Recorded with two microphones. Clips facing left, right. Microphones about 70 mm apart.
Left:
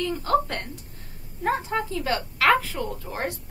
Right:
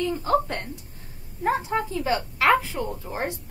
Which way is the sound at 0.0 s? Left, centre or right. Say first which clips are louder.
Even; right.